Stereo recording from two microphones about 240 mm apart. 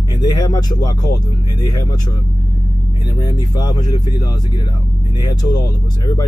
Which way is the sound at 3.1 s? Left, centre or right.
Centre.